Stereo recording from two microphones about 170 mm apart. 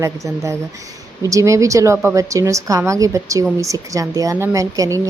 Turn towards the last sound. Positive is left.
turn(degrees=-20)  # may be behind; listen again after turning